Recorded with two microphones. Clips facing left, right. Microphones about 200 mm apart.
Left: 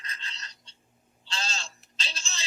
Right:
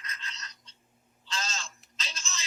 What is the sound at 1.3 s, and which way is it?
Telephone, 30° left (ahead or behind).